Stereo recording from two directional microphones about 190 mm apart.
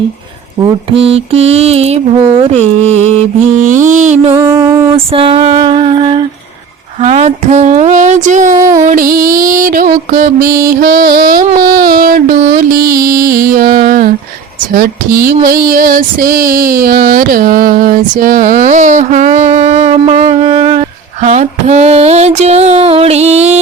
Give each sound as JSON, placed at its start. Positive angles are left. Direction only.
{"t": 0.6, "sound": "female singing", "side_deg": -30}
{"t": 4.4, "sound": "music", "side_deg": -15}
{"t": 5.1, "sound": "a sound", "side_deg": -30}
{"t": 7.0, "sound": "female singing", "side_deg": -35}
{"t": 8.7, "sound": "music", "side_deg": -40}
{"t": 15.6, "sound": "female singing", "side_deg": -45}